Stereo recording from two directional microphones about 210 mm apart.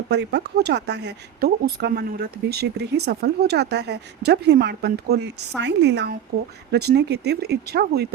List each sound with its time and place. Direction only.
0.1 s speech: 55° right (ahead or behind)